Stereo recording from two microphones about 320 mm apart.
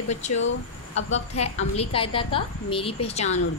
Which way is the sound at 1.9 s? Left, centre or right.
Centre.